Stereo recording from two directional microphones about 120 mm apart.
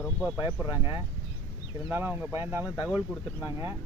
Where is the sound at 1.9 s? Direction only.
20° right (ahead or behind).